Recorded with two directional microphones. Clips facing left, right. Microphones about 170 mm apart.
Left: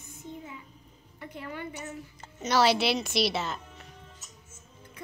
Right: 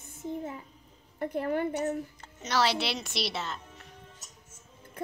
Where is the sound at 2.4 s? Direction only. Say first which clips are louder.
Left 4 dB; 10° left (ahead or behind).